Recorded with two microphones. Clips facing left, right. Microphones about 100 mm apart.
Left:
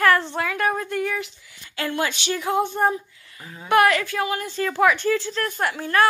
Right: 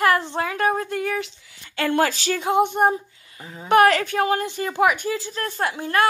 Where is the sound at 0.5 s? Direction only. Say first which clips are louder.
Right 2 dB; 30° right (ahead or behind).